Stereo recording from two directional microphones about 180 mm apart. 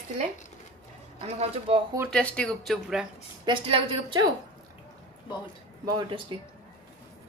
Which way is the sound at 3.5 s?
30° right (ahead or behind).